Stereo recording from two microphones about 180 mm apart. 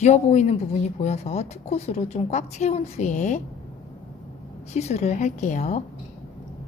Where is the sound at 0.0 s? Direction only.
40° left (ahead or behind).